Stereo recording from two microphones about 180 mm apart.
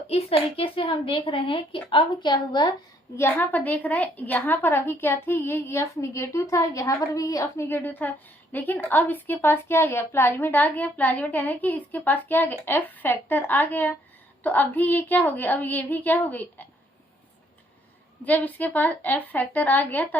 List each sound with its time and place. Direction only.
0.1 s a woman's voice: 30° left (ahead or behind)
3.2 s a woman's voice: 15° left (ahead or behind)
18.3 s a woman's voice: 10° left (ahead or behind)